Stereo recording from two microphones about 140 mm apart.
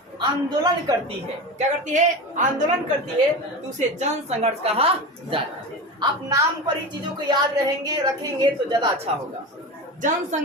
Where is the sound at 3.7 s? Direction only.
55° right (ahead or behind).